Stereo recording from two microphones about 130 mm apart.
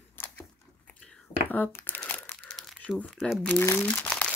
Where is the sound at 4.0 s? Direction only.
10° left (ahead or behind).